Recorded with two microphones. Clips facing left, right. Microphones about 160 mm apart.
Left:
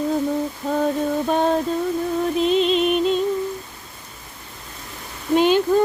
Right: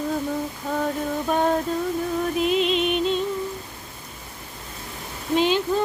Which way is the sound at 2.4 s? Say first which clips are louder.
Left 4 dB; 35° left (ahead or behind).